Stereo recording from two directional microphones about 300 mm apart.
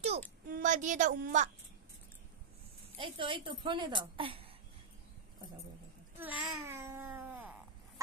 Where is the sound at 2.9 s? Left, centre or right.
Centre.